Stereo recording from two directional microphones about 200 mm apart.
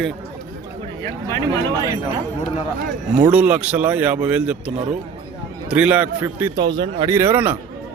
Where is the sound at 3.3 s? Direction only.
5° right (ahead or behind).